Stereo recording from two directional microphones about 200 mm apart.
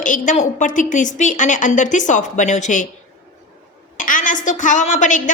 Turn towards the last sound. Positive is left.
turn(degrees=40)  # may be behind; listen again after turning